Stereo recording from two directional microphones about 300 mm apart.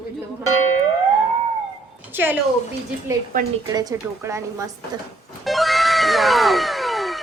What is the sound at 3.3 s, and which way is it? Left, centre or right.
Speech, right.